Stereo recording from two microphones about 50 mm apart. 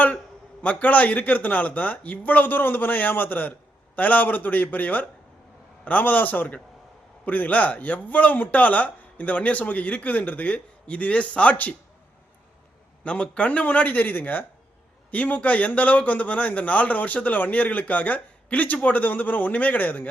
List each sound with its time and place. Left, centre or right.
0.6 s a man's voice: left
13.1 s a man's voice: left